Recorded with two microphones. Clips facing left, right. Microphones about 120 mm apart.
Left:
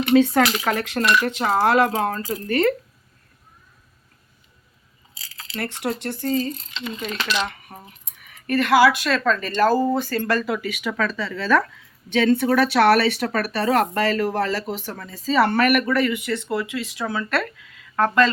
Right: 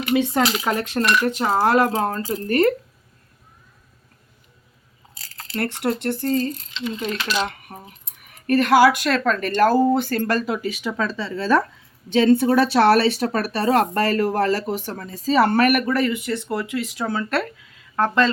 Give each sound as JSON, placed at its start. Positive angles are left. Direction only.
{"t": 0.1, "sound": "speech", "side_deg": -15}
{"t": 5.1, "sound": "speech", "side_deg": -50}
{"t": 7.0, "sound": "speech", "side_deg": -35}
{"t": 10.6, "sound": "speech", "side_deg": -35}
{"t": 17.9, "sound": "speech", "side_deg": -25}